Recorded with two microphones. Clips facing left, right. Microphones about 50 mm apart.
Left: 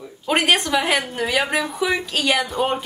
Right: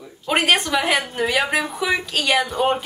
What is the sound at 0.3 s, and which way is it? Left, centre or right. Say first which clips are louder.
A woman's voice: even; centre.